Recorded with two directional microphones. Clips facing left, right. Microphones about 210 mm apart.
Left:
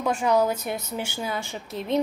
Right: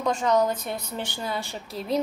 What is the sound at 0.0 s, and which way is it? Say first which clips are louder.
A woman's voice: left 1 dB; 10° left (ahead or behind).